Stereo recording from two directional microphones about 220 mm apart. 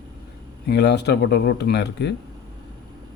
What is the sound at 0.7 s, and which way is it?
Speech, 50° left (ahead or behind).